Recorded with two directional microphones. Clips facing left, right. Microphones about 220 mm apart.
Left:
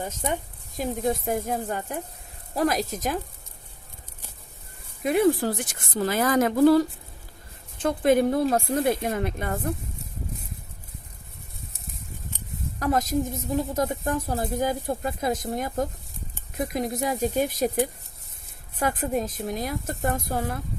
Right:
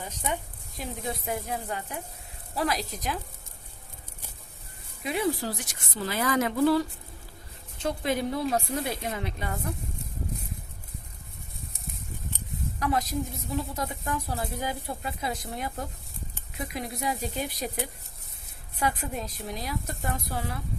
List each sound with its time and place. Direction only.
0.0 s a woman's voice: 45° left (ahead or behind)
5.0 s a woman's voice: 50° left (ahead or behind)
12.8 s a woman's voice: 45° left (ahead or behind)